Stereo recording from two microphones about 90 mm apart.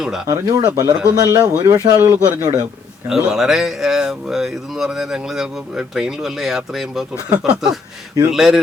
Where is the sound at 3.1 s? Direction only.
5° right (ahead or behind).